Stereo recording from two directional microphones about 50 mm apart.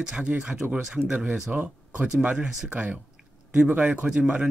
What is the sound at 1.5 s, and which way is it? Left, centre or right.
Speech, right.